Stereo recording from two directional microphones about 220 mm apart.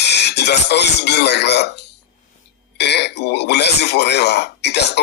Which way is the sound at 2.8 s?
50° left (ahead or behind).